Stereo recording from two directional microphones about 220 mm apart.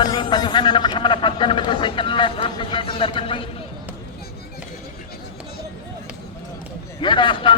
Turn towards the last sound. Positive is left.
turn(degrees=20)  # may be behind; listen again after turning